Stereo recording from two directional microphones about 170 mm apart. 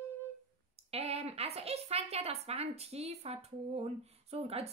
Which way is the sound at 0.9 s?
35° right (ahead or behind).